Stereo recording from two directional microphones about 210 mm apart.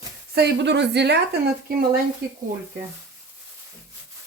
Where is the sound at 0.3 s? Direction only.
55° right (ahead or behind).